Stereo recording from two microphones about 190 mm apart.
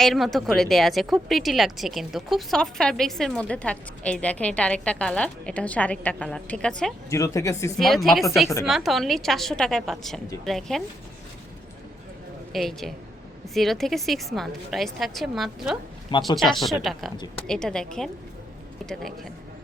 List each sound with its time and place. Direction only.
0.0 s a woman's voice: centre (ahead or behind)
7.1 s a woman's voice: 15° left (ahead or behind)
7.8 s a woman's voice: centre (ahead or behind)
12.5 s a woman's voice: centre (ahead or behind)